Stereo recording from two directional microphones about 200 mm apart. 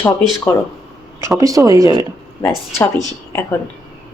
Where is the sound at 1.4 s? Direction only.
15° right (ahead or behind).